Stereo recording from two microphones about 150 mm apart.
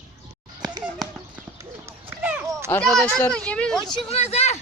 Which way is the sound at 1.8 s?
15° right (ahead or behind).